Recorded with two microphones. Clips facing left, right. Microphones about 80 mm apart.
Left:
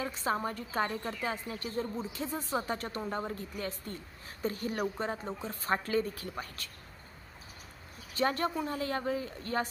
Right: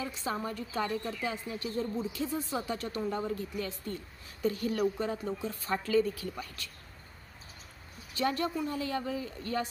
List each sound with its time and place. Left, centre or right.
0.0 s speech: left
8.1 s speech: left